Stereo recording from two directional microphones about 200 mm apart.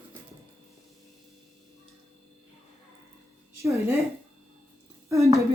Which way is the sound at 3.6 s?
15° right (ahead or behind).